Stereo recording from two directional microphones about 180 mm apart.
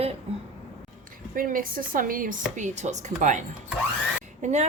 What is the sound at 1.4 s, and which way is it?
Speech, 50° right (ahead or behind).